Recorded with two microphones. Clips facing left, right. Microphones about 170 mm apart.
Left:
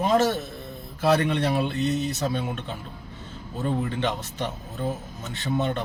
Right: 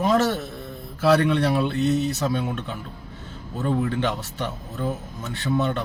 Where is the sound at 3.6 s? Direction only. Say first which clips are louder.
Right 3 dB; 15° left (ahead or behind).